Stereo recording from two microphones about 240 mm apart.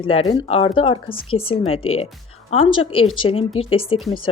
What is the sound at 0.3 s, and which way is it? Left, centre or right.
Speech, left.